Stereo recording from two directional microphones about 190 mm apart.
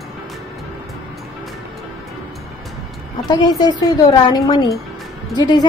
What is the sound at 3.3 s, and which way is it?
A woman's voice, 20° left (ahead or behind).